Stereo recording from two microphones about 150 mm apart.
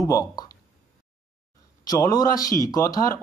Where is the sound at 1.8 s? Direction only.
25° left (ahead or behind).